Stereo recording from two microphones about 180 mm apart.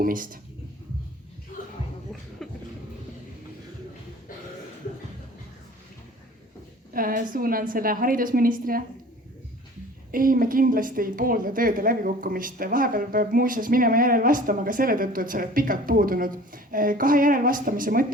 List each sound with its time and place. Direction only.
0.0 s a woman's voice: 50° right (ahead or behind)
2.1 s a sound: centre (ahead or behind)
6.9 s a woman's voice: 50° right (ahead or behind)
10.1 s a woman's voice: 50° right (ahead or behind)